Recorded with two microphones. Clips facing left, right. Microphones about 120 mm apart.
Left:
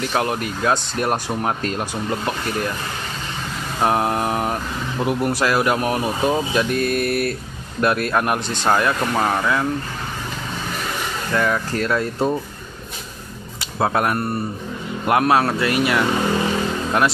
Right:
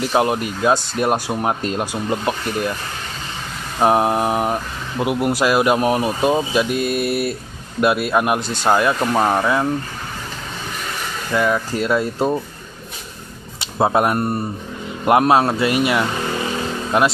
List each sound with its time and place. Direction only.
0.0 s speech: 20° right (ahead or behind)
3.8 s speech: 20° right (ahead or behind)
11.3 s speech: 10° right (ahead or behind)
13.6 s speech: 20° right (ahead or behind)